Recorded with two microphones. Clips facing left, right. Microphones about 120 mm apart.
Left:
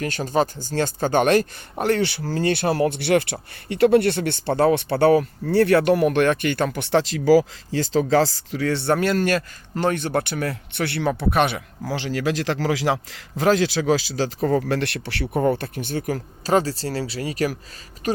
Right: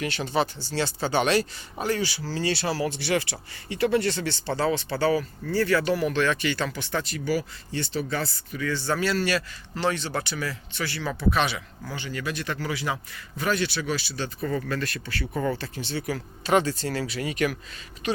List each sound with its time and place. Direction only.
0.0 s speech: 45° left (ahead or behind)
1.8 s speech: 65° left (ahead or behind)
11.9 s a man's voice: 90° left; by 15.4 s 70° left (ahead or behind)
15.4 s speech: 50° left (ahead or behind)